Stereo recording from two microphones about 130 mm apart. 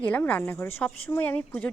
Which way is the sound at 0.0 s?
10° left (ahead or behind).